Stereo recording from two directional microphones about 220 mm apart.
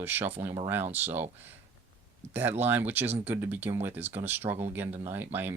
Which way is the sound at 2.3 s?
10° right (ahead or behind).